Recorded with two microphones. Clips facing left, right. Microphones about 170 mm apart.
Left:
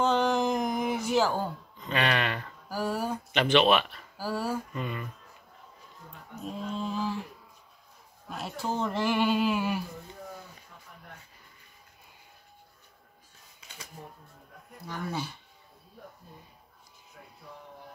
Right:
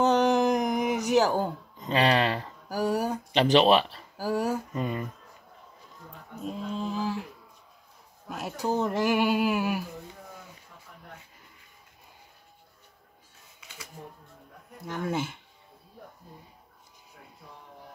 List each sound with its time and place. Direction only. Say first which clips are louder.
0.0 s music: right 3 dB; 15° right (ahead or behind)
1.8 s speech: right 5 dB; 30° right (ahead or behind)
2.7 s speech: right 4 dB; 15° right (ahead or behind)
3.3 s speech: right 3 dB; 35° right (ahead or behind)
4.2 s female singing: right 4 dB; 15° right (ahead or behind)
4.7 s speech: right 4 dB; 40° right (ahead or behind)
6.8 s a sound: right 1 dB; 10° right (ahead or behind)
8.3 s speech: right 2 dB; 10° right (ahead or behind)
8.6 s female singing: right 3 dB; 15° right (ahead or behind)
14.9 s speech: right 4 dB; 20° right (ahead or behind)